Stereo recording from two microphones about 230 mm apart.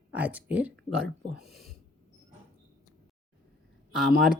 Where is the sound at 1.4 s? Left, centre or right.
Right.